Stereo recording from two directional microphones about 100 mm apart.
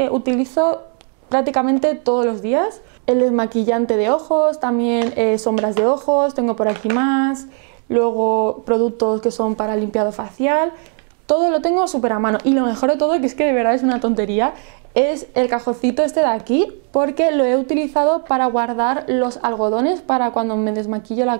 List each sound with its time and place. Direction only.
0.0 s speech: 15° right (ahead or behind)